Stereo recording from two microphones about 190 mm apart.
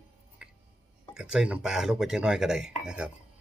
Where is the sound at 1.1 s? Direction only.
5° right (ahead or behind).